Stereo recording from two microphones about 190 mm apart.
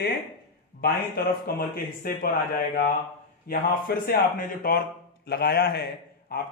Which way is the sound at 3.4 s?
50° left (ahead or behind).